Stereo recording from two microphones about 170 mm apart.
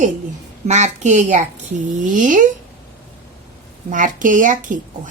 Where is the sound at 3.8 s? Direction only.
50° right (ahead or behind).